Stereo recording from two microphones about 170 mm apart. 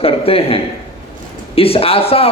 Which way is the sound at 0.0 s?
35° left (ahead or behind).